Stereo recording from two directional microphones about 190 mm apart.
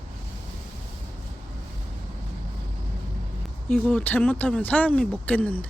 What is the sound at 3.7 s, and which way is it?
Speech, 5° left (ahead or behind).